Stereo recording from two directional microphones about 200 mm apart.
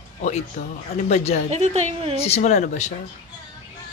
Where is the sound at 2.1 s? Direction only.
30° left (ahead or behind).